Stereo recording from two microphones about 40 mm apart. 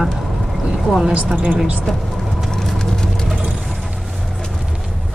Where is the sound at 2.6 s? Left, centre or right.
Centre.